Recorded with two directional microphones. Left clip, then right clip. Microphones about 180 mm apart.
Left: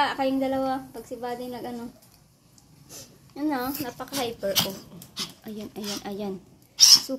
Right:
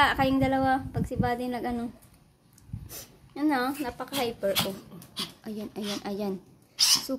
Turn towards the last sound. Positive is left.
turn(degrees=0)  # may be behind; listen again after turning